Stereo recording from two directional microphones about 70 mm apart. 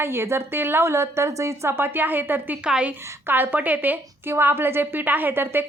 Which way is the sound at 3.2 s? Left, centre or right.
Right.